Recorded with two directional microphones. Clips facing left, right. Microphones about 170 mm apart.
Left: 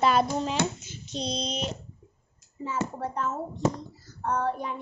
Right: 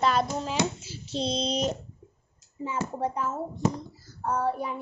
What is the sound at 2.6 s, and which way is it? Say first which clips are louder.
Child singing: right 1 dB; 15° right (ahead or behind).